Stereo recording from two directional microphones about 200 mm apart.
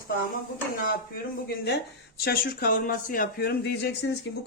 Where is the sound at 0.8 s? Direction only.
50° left (ahead or behind).